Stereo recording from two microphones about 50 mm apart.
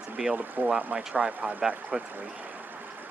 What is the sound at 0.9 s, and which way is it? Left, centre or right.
Speech, centre.